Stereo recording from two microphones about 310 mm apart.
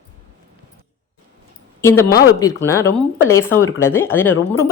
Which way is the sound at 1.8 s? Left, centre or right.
Centre.